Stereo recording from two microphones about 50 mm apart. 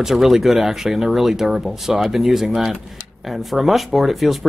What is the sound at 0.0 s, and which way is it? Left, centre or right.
Speech, centre.